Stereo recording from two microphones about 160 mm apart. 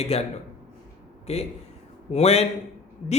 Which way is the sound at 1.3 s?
40° left (ahead or behind).